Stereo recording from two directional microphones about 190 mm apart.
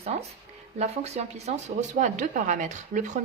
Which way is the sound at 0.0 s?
35° right (ahead or behind).